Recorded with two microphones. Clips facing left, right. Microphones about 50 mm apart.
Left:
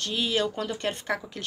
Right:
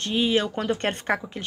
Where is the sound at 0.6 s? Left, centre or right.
Right.